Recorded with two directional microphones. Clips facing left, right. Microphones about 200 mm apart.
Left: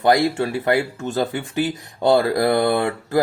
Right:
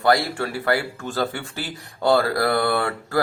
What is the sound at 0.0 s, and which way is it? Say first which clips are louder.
Speech: left 3 dB; 20° left (ahead or behind).